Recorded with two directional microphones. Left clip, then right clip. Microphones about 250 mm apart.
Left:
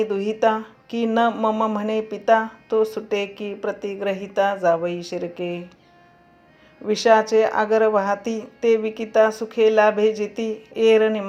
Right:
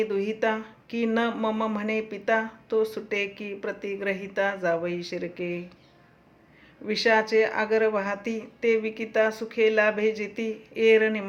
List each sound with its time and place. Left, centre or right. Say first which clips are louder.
0.0 s speech: left 6 dB; centre
6.8 s speech: left 6 dB; centre